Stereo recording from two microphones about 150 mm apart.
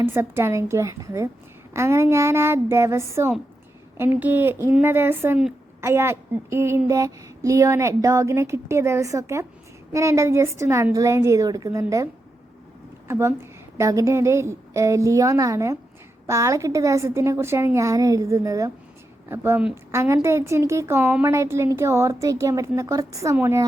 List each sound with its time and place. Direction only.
0.0 s speech: 15° right (ahead or behind)
13.1 s speech: 15° right (ahead or behind)